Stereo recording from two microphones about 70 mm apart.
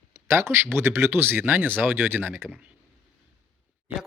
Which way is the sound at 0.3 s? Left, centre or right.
Right.